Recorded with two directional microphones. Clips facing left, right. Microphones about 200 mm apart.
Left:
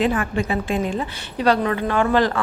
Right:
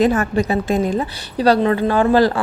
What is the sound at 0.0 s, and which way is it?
A woman's voice, 40° right (ahead or behind).